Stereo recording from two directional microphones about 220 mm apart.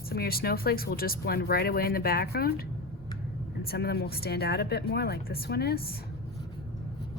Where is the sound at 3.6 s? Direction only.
45° left (ahead or behind).